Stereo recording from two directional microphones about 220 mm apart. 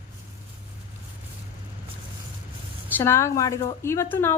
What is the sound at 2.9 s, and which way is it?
A woman's voice, 10° left (ahead or behind).